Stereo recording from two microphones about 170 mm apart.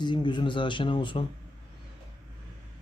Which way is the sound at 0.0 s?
25° left (ahead or behind).